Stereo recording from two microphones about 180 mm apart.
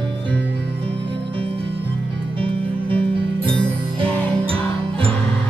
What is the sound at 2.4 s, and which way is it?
Music, 30° right (ahead or behind).